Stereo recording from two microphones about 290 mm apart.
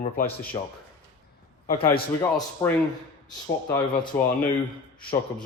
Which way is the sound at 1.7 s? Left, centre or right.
Centre.